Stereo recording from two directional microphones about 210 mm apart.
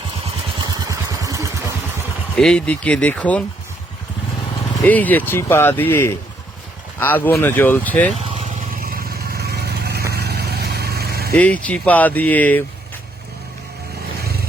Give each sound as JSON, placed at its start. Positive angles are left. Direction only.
{"t": 0.6, "sound": "vehicle", "side_deg": -20}
{"t": 2.3, "sound": "speech", "side_deg": 5}
{"t": 4.9, "sound": "speech", "side_deg": 10}
{"t": 8.4, "sound": "vehicle", "side_deg": -40}
{"t": 11.3, "sound": "speech", "side_deg": 5}
{"t": 14.2, "sound": "vehicle", "side_deg": -45}